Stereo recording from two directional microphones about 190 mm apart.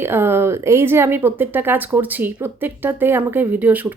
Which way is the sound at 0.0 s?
10° right (ahead or behind).